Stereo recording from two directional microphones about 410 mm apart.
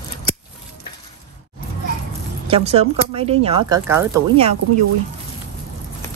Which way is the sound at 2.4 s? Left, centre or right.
Centre.